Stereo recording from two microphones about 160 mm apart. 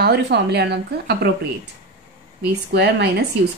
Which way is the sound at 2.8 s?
90° right.